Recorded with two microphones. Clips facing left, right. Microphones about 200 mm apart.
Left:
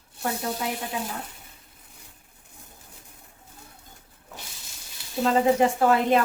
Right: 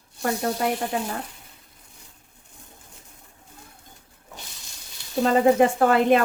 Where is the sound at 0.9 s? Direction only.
50° right (ahead or behind).